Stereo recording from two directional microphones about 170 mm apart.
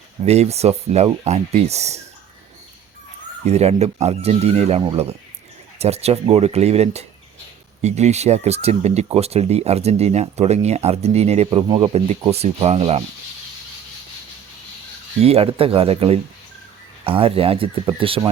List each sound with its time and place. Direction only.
0.3 s speech: 40° right (ahead or behind)
3.4 s speech: 40° right (ahead or behind)
5.8 s speech: 40° right (ahead or behind)
15.2 s speech: 35° right (ahead or behind)